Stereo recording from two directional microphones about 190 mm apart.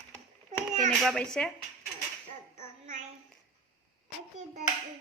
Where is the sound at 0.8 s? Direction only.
5° left (ahead or behind).